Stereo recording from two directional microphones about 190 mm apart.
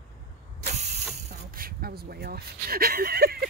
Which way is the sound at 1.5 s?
50° right (ahead or behind).